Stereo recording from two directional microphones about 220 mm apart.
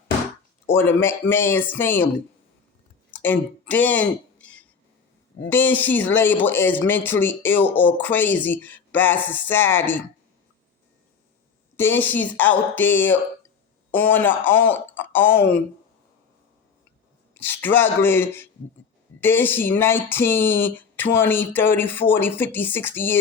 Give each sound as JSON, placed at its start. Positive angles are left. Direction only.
{"t": 0.7, "sound": "speech", "side_deg": 10}
{"t": 3.1, "sound": "a sound", "side_deg": 10}
{"t": 5.5, "sound": "speech", "side_deg": 10}
{"t": 11.8, "sound": "speech", "side_deg": 10}
{"t": 17.3, "sound": "speech", "side_deg": 10}